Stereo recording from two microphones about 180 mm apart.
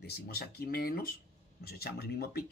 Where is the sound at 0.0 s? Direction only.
60° left (ahead or behind).